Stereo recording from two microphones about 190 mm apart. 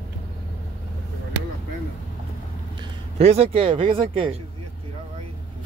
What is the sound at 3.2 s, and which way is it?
Speech, 30° right (ahead or behind).